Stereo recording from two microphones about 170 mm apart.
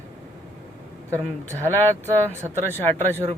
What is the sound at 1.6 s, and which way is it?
Speech, 10° left (ahead or behind).